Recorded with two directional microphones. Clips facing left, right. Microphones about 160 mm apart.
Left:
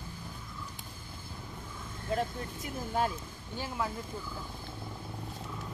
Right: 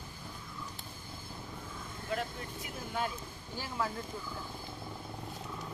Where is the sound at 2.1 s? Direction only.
40° left (ahead or behind).